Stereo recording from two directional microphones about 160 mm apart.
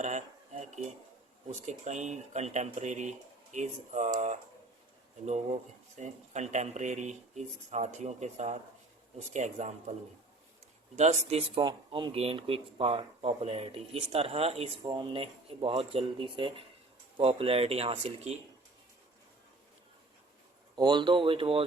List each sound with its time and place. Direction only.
0.0 s dishes: 45° right (ahead or behind)
1.6 s speech: 45° right (ahead or behind)
5.2 s speech: 45° right (ahead or behind)
10.9 s speech: 45° right (ahead or behind)
11.6 s speech: 30° right (ahead or behind)
20.7 s speech: 25° right (ahead or behind)